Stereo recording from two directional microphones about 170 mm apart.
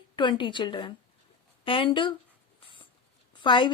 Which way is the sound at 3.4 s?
30° left (ahead or behind).